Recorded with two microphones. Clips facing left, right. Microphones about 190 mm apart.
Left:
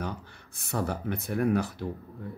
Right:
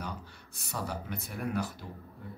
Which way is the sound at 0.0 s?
55° left (ahead or behind).